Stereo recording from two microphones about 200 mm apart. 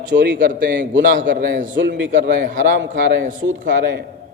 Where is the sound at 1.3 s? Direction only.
65° right (ahead or behind).